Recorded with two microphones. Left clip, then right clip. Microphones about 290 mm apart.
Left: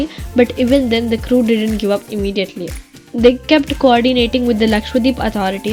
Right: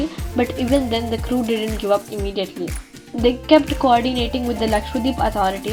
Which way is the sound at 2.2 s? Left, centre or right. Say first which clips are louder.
Left 5 dB; left.